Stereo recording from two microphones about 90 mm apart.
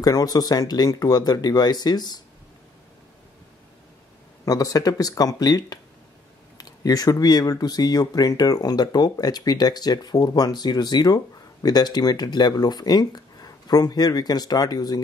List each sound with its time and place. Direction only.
0.0 s speech: 45° left (ahead or behind)
4.5 s speech: 45° left (ahead or behind)